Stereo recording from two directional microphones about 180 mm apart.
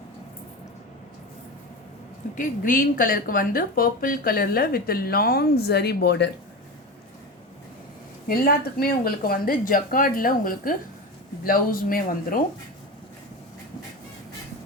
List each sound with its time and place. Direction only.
2.3 s a woman's voice: 50° left (ahead or behind); by 6.3 s 70° left (ahead or behind)
8.3 s a woman's voice: 55° left (ahead or behind)